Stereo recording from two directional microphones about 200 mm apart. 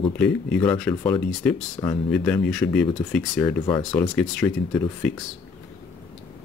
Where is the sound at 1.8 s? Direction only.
20° left (ahead or behind).